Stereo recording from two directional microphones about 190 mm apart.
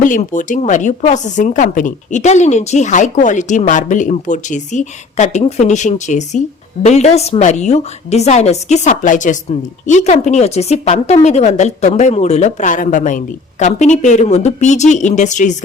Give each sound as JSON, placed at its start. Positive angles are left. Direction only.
{"t": 0.0, "sound": "a woman's voice", "side_deg": 45}